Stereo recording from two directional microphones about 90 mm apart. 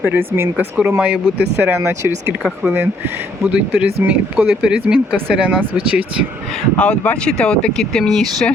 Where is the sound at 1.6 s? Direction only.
30° right (ahead or behind).